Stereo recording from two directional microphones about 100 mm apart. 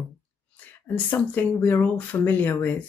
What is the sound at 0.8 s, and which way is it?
Speech, 20° left (ahead or behind).